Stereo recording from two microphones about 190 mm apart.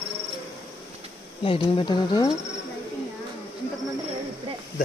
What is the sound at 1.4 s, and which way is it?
Speech, 30° left (ahead or behind).